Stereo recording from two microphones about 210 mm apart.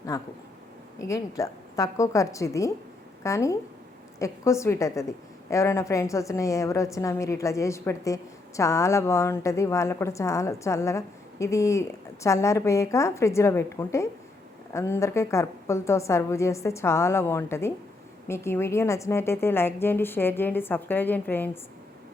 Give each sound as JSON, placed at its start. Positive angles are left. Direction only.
{"t": 0.1, "sound": "a woman's voice", "side_deg": 15}